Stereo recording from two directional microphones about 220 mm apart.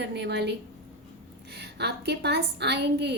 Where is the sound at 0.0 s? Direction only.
50° right (ahead or behind).